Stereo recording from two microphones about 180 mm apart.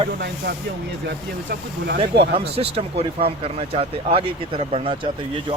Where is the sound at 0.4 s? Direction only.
60° right (ahead or behind).